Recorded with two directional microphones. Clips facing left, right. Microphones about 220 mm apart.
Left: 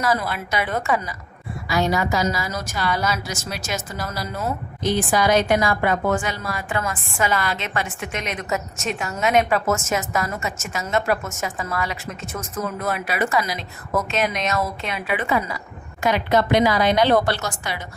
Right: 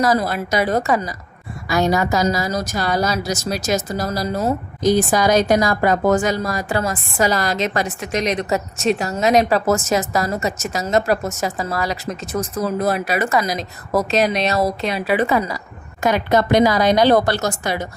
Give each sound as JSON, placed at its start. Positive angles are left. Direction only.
{"t": 0.0, "sound": "a woman's voice", "side_deg": -40}